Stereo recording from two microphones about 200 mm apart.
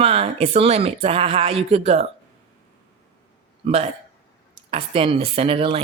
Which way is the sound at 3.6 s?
30° right (ahead or behind).